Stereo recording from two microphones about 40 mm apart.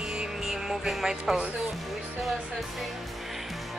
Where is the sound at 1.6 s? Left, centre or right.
Centre.